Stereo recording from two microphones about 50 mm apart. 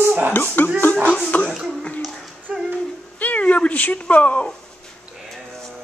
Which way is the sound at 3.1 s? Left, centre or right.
Left.